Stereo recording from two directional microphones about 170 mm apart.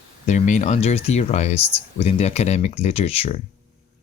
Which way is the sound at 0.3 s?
45° left (ahead or behind).